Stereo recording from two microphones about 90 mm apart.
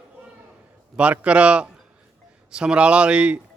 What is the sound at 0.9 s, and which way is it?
A man's voice, 15° right (ahead or behind).